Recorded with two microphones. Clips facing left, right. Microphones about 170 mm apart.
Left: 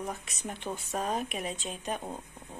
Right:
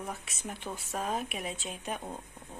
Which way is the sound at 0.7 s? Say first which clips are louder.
Left 1 dB; 5° right (ahead or behind).